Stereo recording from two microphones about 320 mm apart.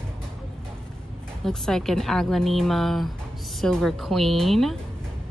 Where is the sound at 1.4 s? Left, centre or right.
Centre.